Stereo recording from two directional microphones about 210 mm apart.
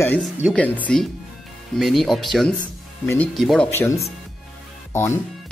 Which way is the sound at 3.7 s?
10° left (ahead or behind).